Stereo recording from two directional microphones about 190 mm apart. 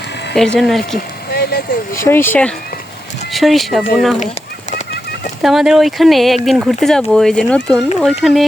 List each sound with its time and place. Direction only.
0.3 s speech: 5° left (ahead or behind)
0.9 s speech: 55° left (ahead or behind)
2.0 s speech: 10° left (ahead or behind)
3.3 s speech: centre (ahead or behind)
5.4 s speech: centre (ahead or behind)